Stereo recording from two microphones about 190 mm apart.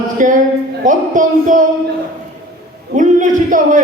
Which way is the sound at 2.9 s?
40° right (ahead or behind).